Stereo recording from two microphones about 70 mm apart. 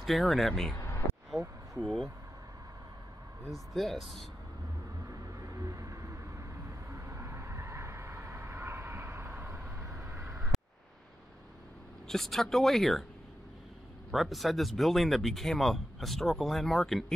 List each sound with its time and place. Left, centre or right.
0.0 s speech: centre
0.7 s vehicle: left
1.4 s speech: right
3.4 s speech: centre
5.0 s vehicle: right
10.5 s a sound: centre
12.1 s speech: centre
14.1 s speech: centre